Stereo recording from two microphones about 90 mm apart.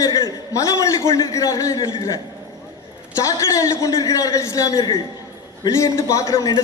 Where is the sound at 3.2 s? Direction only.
35° left (ahead or behind).